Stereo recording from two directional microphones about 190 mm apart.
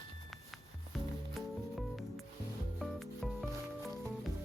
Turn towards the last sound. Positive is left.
turn(degrees=0)  # may be behind; listen again after turning